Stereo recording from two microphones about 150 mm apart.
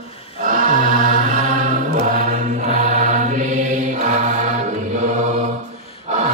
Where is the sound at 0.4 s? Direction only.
65° right (ahead or behind).